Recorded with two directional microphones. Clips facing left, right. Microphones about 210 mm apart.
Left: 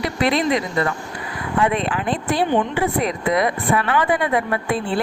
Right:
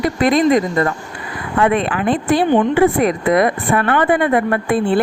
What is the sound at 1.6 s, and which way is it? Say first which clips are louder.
A woman's voice: right 5 dB; 60° right (ahead or behind).